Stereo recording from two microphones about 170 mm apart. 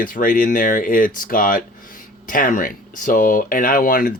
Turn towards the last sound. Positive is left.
turn(degrees=55)  # may be behind; listen again after turning